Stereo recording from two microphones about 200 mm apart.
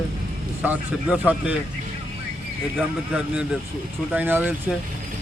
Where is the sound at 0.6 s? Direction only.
5° right (ahead or behind).